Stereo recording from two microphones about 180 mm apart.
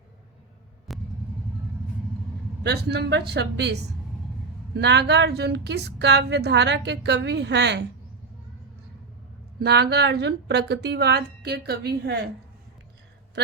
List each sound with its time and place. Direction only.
0.9 s vehicle: centre (ahead or behind)
2.6 s a woman's voice: 65° right (ahead or behind)
9.6 s a woman's voice: 65° right (ahead or behind)